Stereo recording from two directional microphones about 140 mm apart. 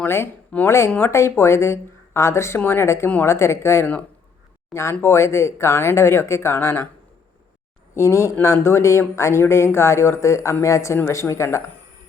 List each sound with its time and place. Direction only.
0.0 s speech: 15° left (ahead or behind)
7.9 s speech: 20° left (ahead or behind)